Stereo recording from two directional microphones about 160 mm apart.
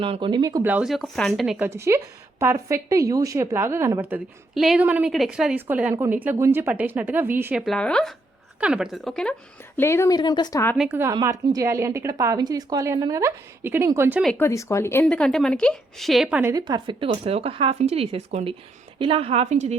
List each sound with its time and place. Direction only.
0.0 s a woman's voice: 30° right (ahead or behind)
0.6 s speech: 10° right (ahead or behind)
1.6 s a woman's voice: 15° right (ahead or behind)
4.5 s a woman's voice: centre (ahead or behind)
7.6 s speech: 5° left (ahead or behind)
9.7 s speech: 15° left (ahead or behind)
10.2 s speech: 25° left (ahead or behind)
10.8 s a woman's voice: 10° right (ahead or behind)
14.3 s speech: 15° left (ahead or behind)
15.0 s a woman's voice: 5° left (ahead or behind); by 19.7 s 45° right (ahead or behind)